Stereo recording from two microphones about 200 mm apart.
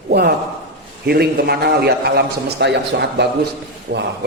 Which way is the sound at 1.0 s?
50° right (ahead or behind).